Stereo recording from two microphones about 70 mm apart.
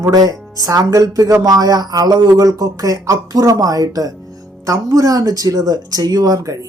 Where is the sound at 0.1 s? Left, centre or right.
Right.